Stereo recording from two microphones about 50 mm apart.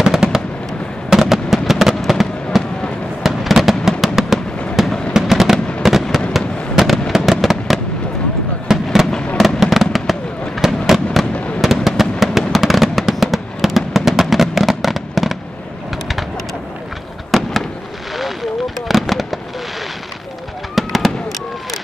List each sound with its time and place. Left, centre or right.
0.0 s fireworks: centre
4.0 s music: centre
4.8 s fireworks: centre
11.3 s fireworks: left
11.6 s fireworks: centre
17.3 s fireworks: centre
20.7 s fireworks: centre